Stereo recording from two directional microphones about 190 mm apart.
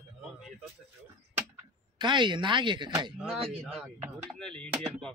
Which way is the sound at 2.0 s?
25° right (ahead or behind).